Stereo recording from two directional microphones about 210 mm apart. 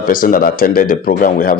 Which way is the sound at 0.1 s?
40° left (ahead or behind).